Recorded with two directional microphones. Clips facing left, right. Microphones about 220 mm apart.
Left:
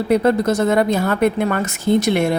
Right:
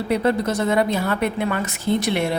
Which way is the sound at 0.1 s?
45° left (ahead or behind).